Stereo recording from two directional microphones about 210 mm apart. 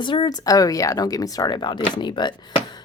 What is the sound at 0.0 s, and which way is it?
Speech, 20° left (ahead or behind).